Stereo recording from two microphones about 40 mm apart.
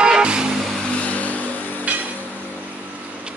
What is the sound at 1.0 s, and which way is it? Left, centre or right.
Vehicle, left.